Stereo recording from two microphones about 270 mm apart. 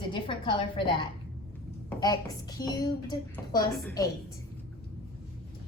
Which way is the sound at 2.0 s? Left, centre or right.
Centre.